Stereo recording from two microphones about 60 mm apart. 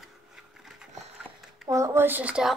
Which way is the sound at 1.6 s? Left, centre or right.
Right.